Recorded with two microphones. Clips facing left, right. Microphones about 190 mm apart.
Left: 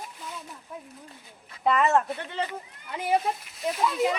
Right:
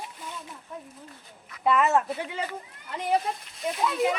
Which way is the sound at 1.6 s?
Centre (ahead or behind).